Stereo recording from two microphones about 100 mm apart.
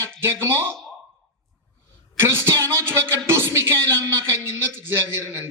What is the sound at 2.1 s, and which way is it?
Speech, 25° right (ahead or behind).